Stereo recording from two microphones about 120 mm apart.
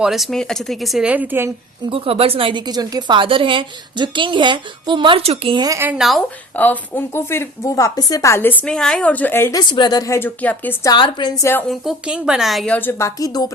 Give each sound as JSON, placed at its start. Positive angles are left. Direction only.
{"t": 0.0, "sound": "speech", "side_deg": 0}
{"t": 1.0, "sound": "a woman's voice", "side_deg": -10}
{"t": 1.9, "sound": "a woman's voice", "side_deg": -50}
{"t": 5.6, "sound": "a woman's voice", "side_deg": -25}
{"t": 5.9, "sound": "speech", "side_deg": 0}
{"t": 6.6, "sound": "a woman's voice", "side_deg": 15}
{"t": 9.6, "sound": "a woman's voice", "side_deg": 35}
{"t": 10.2, "sound": "a woman's voice", "side_deg": 15}
{"t": 10.9, "sound": "a woman's voice", "side_deg": 40}
{"t": 11.7, "sound": "speech", "side_deg": -5}
{"t": 12.7, "sound": "a woman's voice", "side_deg": 20}